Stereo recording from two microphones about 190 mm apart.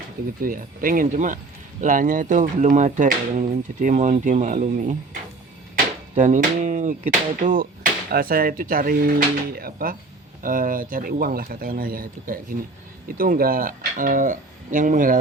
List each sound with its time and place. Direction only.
0.4 s speech: 50° right (ahead or behind)